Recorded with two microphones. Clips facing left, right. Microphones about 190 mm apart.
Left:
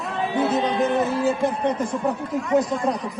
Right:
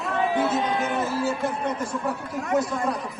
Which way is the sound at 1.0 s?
15° left (ahead or behind).